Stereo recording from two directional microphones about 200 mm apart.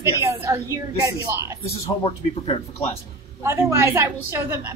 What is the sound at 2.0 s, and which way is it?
Speech, 25° left (ahead or behind).